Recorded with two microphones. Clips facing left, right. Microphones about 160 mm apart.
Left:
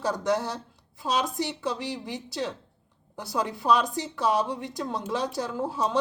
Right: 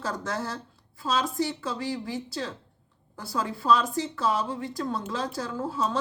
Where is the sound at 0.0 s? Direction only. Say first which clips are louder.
Left 5 dB; 15° left (ahead or behind).